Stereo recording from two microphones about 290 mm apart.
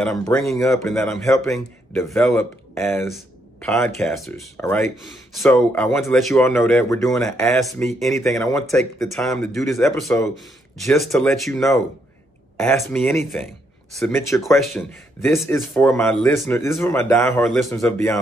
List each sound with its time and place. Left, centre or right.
0.0 s speech: centre